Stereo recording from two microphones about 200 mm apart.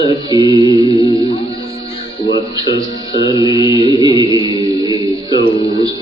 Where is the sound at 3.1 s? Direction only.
20° right (ahead or behind).